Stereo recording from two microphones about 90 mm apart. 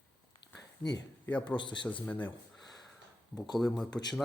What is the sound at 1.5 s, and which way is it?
Speech, 60° left (ahead or behind).